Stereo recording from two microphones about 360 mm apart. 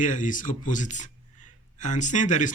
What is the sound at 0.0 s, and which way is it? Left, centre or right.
A man's voice, left.